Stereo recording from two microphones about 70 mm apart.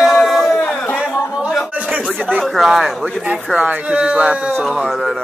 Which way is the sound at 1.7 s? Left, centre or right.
Right.